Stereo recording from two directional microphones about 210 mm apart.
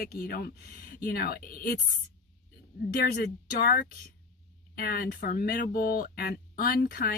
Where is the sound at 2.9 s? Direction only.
45° left (ahead or behind).